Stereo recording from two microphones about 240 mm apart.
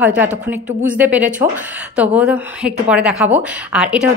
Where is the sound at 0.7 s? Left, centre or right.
Right.